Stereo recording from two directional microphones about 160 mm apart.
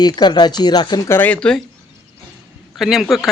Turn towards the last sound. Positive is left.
turn(degrees=0)  # may be behind; listen again after turning